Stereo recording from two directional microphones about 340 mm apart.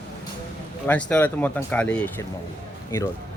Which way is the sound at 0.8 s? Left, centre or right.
Centre.